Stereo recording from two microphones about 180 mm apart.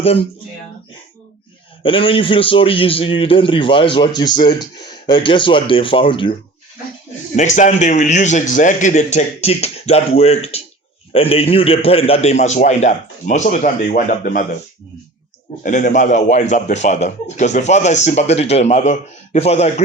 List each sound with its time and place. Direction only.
1.8 s a man's voice: 30° left (ahead or behind)
7.3 s a man's voice: 45° left (ahead or behind)
15.6 s a man's voice: 45° left (ahead or behind)